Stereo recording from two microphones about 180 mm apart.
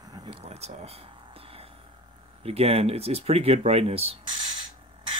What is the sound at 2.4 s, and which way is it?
Speech, 35° right (ahead or behind).